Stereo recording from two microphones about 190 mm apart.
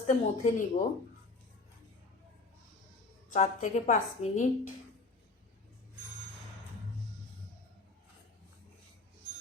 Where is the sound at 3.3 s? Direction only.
40° left (ahead or behind).